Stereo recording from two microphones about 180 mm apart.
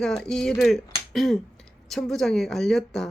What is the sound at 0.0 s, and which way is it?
A woman's voice, 5° left (ahead or behind).